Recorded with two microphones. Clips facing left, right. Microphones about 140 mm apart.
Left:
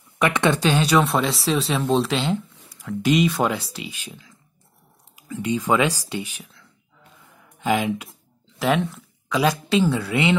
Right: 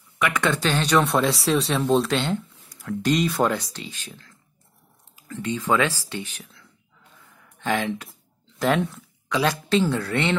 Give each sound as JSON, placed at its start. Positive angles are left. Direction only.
{"t": 0.2, "sound": "speech", "side_deg": 20}
{"t": 6.4, "sound": "whispering", "side_deg": 0}
{"t": 7.4, "sound": "speech", "side_deg": 10}